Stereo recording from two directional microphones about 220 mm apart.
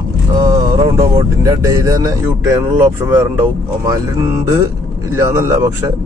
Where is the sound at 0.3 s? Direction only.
20° right (ahead or behind).